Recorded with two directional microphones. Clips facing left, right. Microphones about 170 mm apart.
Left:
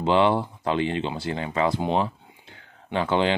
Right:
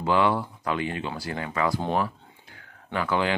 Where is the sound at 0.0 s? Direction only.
25° left (ahead or behind).